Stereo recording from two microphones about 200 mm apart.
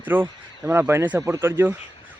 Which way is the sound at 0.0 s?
10° right (ahead or behind).